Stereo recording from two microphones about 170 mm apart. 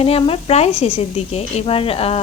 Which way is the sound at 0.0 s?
35° left (ahead or behind).